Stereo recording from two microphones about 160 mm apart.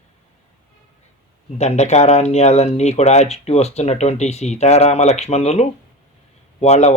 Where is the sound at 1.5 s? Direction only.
45° left (ahead or behind).